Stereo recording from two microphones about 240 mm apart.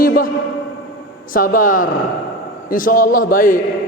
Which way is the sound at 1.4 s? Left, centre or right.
Left.